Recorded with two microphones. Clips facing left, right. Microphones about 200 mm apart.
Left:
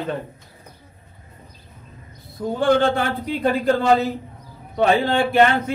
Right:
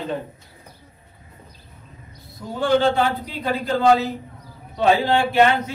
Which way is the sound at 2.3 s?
55° left (ahead or behind).